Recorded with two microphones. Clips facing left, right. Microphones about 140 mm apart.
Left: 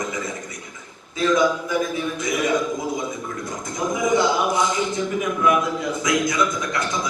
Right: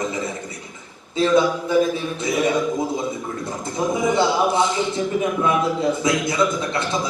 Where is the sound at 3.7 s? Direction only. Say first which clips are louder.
Right 1 dB; 30° right (ahead or behind).